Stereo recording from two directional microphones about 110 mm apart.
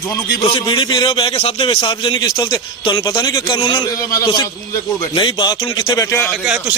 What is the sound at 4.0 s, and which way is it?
Music, 30° left (ahead or behind).